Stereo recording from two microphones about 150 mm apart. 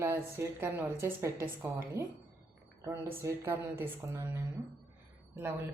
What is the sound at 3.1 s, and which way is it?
A woman's voice, 20° right (ahead or behind).